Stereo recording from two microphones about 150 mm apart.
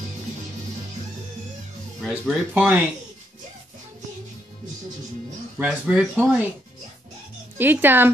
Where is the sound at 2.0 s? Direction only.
5° right (ahead or behind).